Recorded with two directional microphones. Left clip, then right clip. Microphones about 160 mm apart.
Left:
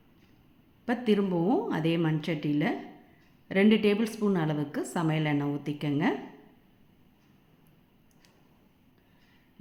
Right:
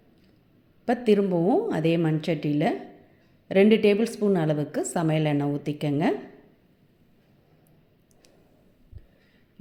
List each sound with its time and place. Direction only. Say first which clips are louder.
0.9 s a woman's voice: right 6 dB; 25° right (ahead or behind)